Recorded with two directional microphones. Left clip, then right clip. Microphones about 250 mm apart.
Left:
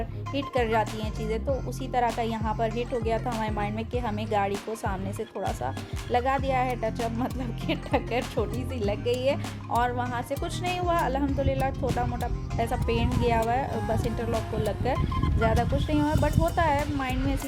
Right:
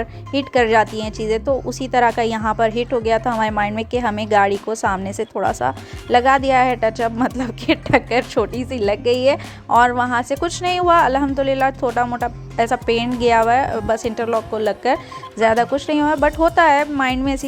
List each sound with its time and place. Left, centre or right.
0.0 s speech: right